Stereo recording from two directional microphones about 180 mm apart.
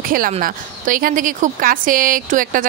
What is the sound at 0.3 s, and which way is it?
Speech, 50° right (ahead or behind).